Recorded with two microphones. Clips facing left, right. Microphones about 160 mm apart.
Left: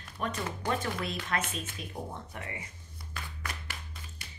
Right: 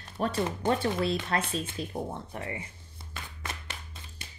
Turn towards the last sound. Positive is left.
turn(degrees=-25)  # may be behind; listen again after turning